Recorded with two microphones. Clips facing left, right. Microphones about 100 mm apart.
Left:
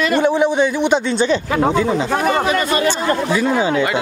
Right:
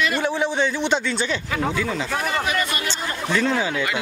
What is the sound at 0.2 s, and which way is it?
A man's voice, 15° left (ahead or behind).